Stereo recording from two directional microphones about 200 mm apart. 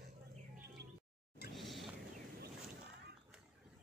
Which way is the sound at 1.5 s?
Centre (ahead or behind).